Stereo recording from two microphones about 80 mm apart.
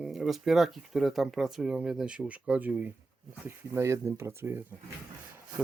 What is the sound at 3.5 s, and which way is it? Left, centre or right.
Speech, right.